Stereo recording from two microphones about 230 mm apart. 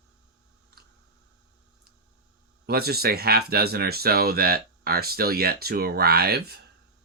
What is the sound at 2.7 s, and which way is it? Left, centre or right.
Speech, right.